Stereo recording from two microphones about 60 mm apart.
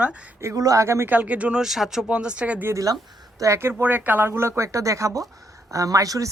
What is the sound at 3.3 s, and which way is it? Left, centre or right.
Speech, right.